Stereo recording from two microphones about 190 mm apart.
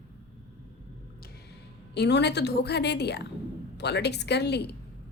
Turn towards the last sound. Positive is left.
turn(degrees=60)  # may be behind; listen again after turning